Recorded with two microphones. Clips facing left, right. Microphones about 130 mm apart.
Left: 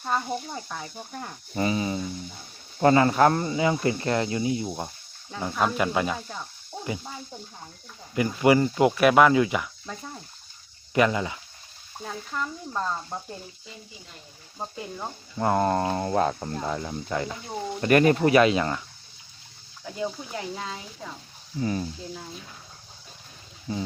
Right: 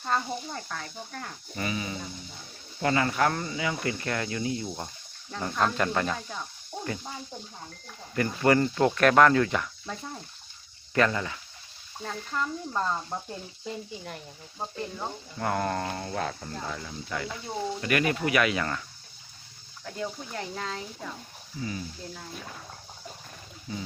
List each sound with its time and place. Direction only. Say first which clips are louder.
0.0 s speech: left 2 dB; 10° left (ahead or behind)
1.5 s speech: left 7 dB; 30° left (ahead or behind)
5.3 s speech: left 2 dB; 10° left (ahead or behind)
6.7 s snake: right 1 dB; 10° left (ahead or behind)
8.1 s speech: left 3 dB; 10° left (ahead or behind)
10.9 s speech: left 3 dB; 15° left (ahead or behind)
12.0 s speech: even; 5° left (ahead or behind)
15.4 s speech: left 6 dB; 25° left (ahead or behind)
19.8 s speech: left 3 dB; 10° left (ahead or behind)
21.6 s speech: left 7 dB; 40° left (ahead or behind)